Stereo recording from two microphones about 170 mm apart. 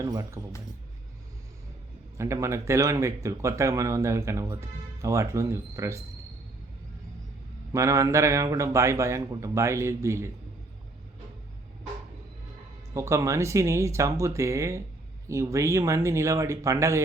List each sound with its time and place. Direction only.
0.0 s speech: 20° right (ahead or behind)
2.1 s speech: 15° right (ahead or behind)
7.7 s speech: 15° right (ahead or behind)
12.9 s speech: 15° right (ahead or behind)